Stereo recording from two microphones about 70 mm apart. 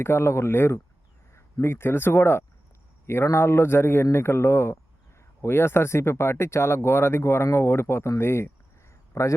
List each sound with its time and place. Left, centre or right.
0.0 s speech: left
9.1 s a man's voice: left